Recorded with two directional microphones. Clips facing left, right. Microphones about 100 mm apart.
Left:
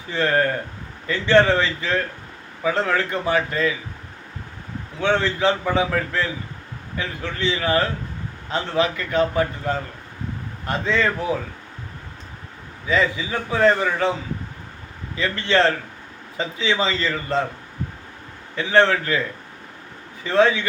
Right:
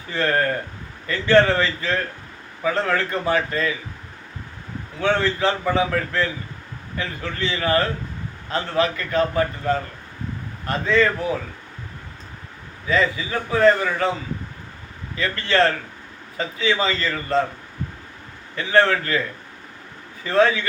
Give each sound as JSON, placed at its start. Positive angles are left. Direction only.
{"t": 0.1, "sound": "a man's voice", "side_deg": 10}
{"t": 4.9, "sound": "a man's voice", "side_deg": 10}
{"t": 12.9, "sound": "a man's voice", "side_deg": 15}
{"t": 15.1, "sound": "a man's voice", "side_deg": 20}
{"t": 17.1, "sound": "a man's voice", "side_deg": 5}
{"t": 18.9, "sound": "a man's voice", "side_deg": 10}
{"t": 20.2, "sound": "a man's voice", "side_deg": 15}